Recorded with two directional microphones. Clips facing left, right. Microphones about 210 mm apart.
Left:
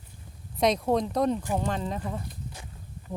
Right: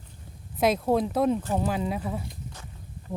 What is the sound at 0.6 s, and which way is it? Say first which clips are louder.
Speech: right 1 dB; 5° right (ahead or behind).